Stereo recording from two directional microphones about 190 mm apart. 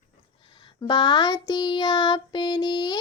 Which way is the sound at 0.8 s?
25° left (ahead or behind).